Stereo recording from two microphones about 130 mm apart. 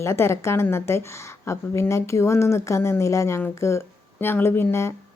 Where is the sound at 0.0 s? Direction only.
20° left (ahead or behind).